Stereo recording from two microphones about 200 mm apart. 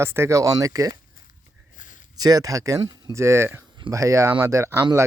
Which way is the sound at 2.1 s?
20° right (ahead or behind).